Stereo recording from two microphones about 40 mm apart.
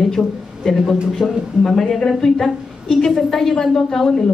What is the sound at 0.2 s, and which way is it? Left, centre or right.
Speech, left.